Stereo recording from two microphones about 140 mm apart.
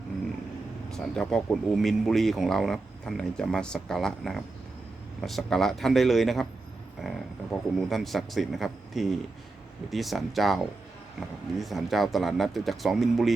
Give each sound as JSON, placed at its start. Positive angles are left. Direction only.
{"t": 0.9, "sound": "speech", "side_deg": 5}